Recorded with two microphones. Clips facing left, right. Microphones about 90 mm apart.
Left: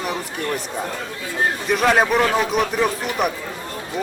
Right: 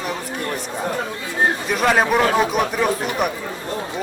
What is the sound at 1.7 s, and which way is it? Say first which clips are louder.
A man's voice: left 2 dB; centre (ahead or behind).